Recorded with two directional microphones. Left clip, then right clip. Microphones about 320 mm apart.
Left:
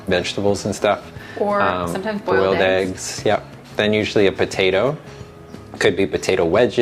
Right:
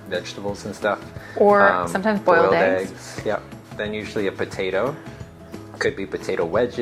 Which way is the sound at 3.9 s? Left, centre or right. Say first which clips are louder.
Left 8 dB; left.